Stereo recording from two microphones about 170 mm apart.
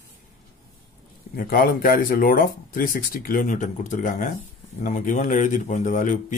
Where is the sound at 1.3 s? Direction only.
55° left (ahead or behind).